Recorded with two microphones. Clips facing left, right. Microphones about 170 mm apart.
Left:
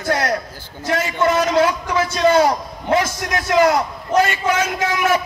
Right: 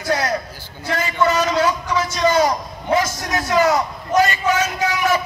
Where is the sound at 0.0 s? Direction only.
60° left (ahead or behind).